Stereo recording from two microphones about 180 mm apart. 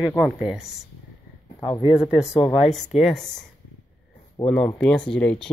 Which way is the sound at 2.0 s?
5° right (ahead or behind).